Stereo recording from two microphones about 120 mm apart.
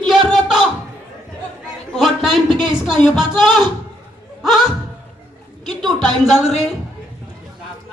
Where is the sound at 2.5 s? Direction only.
40° right (ahead or behind).